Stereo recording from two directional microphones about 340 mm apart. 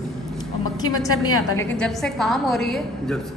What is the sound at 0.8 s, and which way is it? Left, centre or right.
A woman's voice, centre.